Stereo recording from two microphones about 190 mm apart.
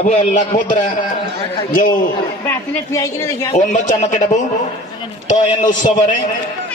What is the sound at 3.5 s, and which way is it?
Speech, 40° left (ahead or behind).